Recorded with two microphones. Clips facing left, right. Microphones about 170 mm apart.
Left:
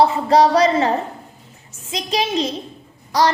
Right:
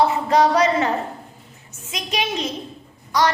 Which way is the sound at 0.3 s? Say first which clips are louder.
Left 3 dB; 35° left (ahead or behind).